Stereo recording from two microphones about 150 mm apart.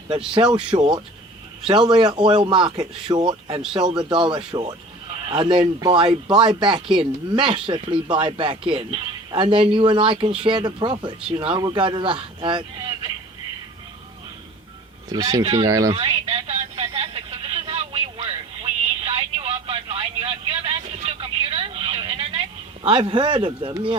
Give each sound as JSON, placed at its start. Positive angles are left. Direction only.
{"t": 0.5, "sound": "speech", "side_deg": -35}
{"t": 15.1, "sound": "speech", "side_deg": -25}
{"t": 15.9, "sound": "a sound", "side_deg": -40}
{"t": 22.8, "sound": "speech", "side_deg": -35}